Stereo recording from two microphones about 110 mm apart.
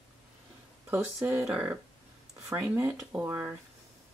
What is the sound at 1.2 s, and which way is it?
Speech, 10° right (ahead or behind).